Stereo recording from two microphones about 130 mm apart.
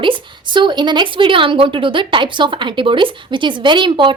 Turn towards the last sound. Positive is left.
turn(degrees=-40)  # may be behind; listen again after turning